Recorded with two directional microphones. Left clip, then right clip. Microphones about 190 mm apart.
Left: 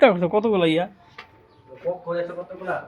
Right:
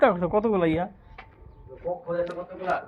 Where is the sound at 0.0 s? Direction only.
45° left (ahead or behind).